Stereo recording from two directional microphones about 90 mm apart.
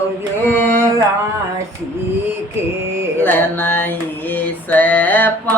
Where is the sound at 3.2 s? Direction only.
20° left (ahead or behind).